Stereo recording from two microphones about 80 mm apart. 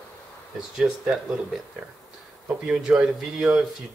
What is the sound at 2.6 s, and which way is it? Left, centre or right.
Speech, centre.